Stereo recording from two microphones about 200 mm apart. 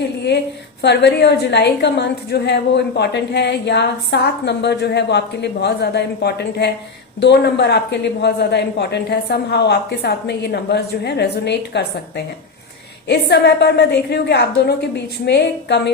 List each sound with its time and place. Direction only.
0.8 s a woman's voice: 60° left (ahead or behind)